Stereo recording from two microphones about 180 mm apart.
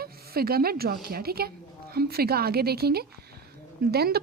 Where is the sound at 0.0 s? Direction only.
60° right (ahead or behind).